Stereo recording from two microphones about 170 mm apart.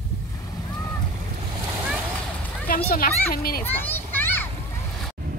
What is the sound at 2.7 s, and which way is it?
Speech, 60° left (ahead or behind).